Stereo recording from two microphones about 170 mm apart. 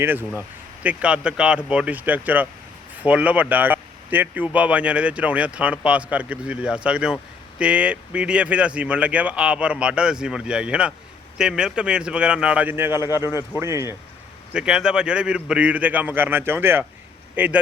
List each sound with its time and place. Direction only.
0.0 s a man's voice: 10° right (ahead or behind)
14.5 s speech: 5° right (ahead or behind)